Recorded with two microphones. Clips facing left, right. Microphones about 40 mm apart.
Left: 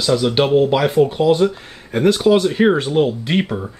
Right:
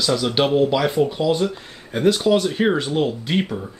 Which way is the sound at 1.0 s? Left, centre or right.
Left.